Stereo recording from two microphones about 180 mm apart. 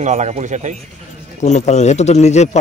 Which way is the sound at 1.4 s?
40° left (ahead or behind).